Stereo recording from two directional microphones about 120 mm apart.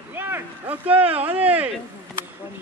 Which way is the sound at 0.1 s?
15° right (ahead or behind).